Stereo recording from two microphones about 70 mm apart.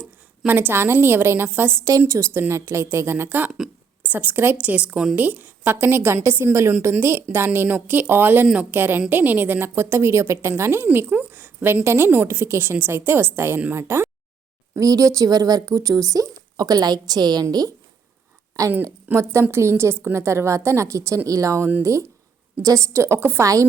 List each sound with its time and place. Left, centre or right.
0.4 s a woman's voice: right
1.8 s a woman's voice: right
10.9 s a woman's voice: right
14.8 s a woman's voice: right
15.3 s a woman's voice: right
16.6 s a woman's voice: right
18.5 s a woman's voice: right
19.1 s a woman's voice: right
23.4 s a woman's voice: right